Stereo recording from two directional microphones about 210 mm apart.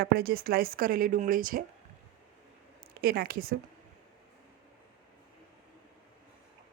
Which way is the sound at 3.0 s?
45° right (ahead or behind).